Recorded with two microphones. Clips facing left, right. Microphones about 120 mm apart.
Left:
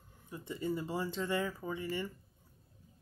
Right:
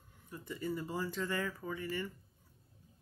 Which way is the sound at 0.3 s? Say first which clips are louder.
Left 2 dB; 25° left (ahead or behind).